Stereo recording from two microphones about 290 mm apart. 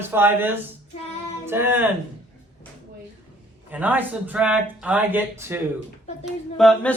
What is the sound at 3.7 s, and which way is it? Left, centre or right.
A woman's voice, centre.